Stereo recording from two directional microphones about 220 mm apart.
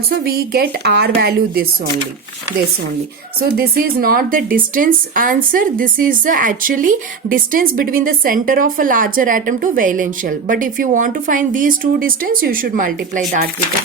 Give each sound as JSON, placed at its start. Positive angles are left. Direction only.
{"t": 0.3, "sound": "a woman's voice", "side_deg": -45}
{"t": 3.6, "sound": "speech", "side_deg": -40}